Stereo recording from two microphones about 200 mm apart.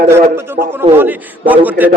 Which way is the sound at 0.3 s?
10° right (ahead or behind).